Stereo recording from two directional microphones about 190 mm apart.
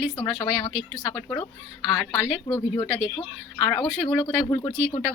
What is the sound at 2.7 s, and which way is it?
Speech, 25° left (ahead or behind).